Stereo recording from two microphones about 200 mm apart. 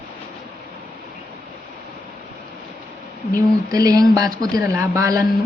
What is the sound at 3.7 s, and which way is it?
Speech, 20° right (ahead or behind).